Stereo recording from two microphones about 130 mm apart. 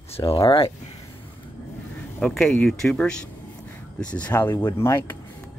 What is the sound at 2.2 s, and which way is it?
Speech, 5° left (ahead or behind).